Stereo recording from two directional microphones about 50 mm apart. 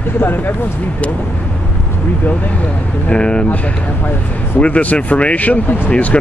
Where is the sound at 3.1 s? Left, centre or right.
Left.